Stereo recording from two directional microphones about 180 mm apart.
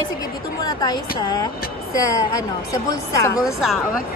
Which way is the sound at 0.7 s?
20° left (ahead or behind).